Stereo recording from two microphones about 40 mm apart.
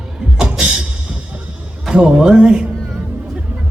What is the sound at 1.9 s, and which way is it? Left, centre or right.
Music, right.